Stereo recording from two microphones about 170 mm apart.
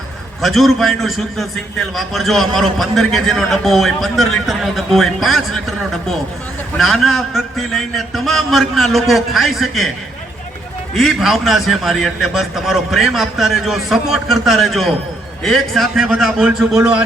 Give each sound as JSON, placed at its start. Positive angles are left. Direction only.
{"t": 0.4, "sound": "a man's voice", "side_deg": 0}
{"t": 6.7, "sound": "a man's voice", "side_deg": 0}
{"t": 10.9, "sound": "a man's voice", "side_deg": 0}